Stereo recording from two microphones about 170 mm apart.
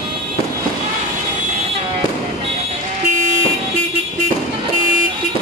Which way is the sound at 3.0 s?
45° right (ahead or behind).